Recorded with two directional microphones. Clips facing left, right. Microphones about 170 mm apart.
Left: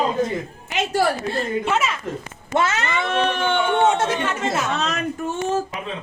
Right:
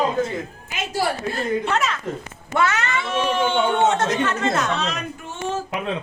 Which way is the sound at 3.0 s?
60° left (ahead or behind).